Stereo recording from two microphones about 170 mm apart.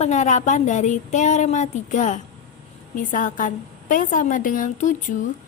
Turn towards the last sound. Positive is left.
turn(degrees=50)  # may be behind; listen again after turning